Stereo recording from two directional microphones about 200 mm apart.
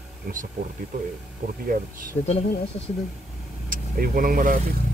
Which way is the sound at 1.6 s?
45° right (ahead or behind).